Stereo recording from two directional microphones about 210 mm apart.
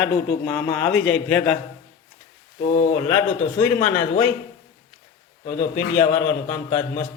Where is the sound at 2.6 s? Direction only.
35° left (ahead or behind).